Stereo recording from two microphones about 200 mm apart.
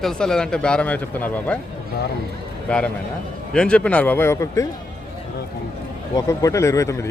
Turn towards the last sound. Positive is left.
turn(degrees=15)  # may be behind; listen again after turning